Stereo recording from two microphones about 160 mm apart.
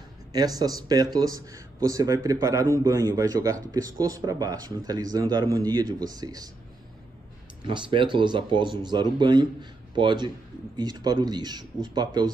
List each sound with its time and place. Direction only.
0.3 s speech: 25° right (ahead or behind)
7.6 s speech: 30° right (ahead or behind)